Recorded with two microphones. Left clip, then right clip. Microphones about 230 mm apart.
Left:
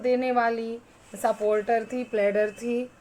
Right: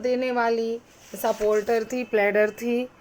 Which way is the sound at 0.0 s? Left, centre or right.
Centre.